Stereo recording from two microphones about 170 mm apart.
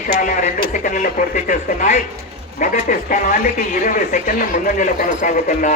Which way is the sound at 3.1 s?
50° left (ahead or behind).